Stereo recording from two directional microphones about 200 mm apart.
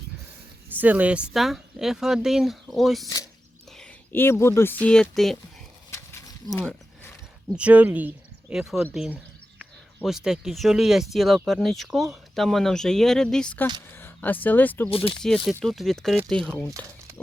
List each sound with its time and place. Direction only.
0.8 s speech: 10° right (ahead or behind)
5.9 s a sound: 15° left (ahead or behind)
6.5 s speech: 5° left (ahead or behind)
7.5 s speech: 5° right (ahead or behind); by 14.8 s 10° left (ahead or behind)
14.8 s speech: 25° left (ahead or behind)
15.4 s speech: centre (ahead or behind)